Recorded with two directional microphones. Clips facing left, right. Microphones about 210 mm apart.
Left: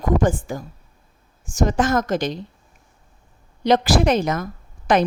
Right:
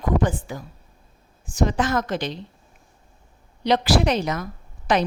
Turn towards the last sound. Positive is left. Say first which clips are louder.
# left 3 dB
turn(degrees=50)  # may be behind; listen again after turning